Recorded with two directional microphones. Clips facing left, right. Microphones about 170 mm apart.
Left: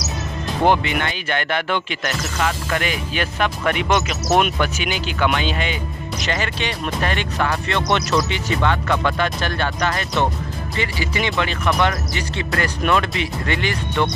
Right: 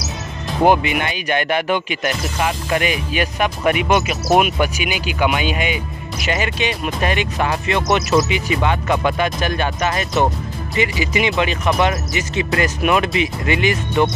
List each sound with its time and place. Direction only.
0.7 s speech: 15° right (ahead or behind)